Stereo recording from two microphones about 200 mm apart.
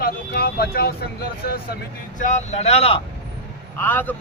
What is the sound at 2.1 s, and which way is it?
Speech, 35° left (ahead or behind).